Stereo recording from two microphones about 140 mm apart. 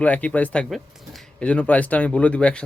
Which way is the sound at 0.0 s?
10° left (ahead or behind).